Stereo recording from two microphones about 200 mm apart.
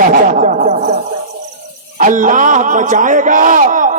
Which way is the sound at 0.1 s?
40° right (ahead or behind).